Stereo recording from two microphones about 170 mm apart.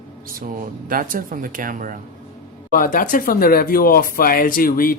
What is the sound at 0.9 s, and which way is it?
Speech, 55° right (ahead or behind).